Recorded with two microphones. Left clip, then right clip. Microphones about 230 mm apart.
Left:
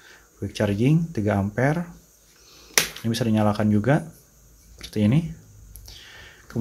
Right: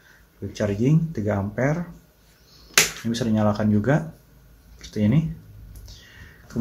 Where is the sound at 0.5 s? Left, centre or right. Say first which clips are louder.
Left 1 dB; left.